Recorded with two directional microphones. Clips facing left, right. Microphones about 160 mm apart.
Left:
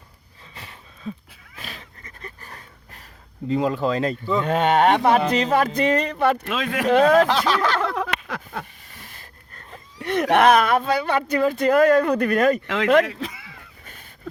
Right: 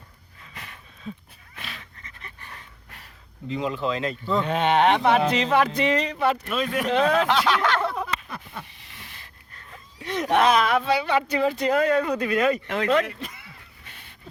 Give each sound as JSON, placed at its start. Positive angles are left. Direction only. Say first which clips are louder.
{"t": 1.5, "sound": "dog", "louder": "left 2 dB", "side_deg": 40}
{"t": 3.5, "sound": "speech", "louder": "left 5 dB", "side_deg": 45}
{"t": 6.4, "sound": "speech", "louder": "left 2 dB", "side_deg": 90}
{"t": 6.9, "sound": "speech", "louder": "left 6 dB", "side_deg": 45}
{"t": 7.8, "sound": "a sound", "louder": "left 2 dB", "side_deg": 90}
{"t": 8.9, "sound": "speech", "louder": "left 2 dB", "side_deg": 45}
{"t": 12.6, "sound": "speech", "louder": "left 4 dB", "side_deg": 90}